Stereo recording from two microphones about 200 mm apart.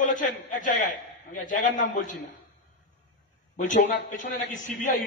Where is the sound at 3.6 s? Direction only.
40° left (ahead or behind).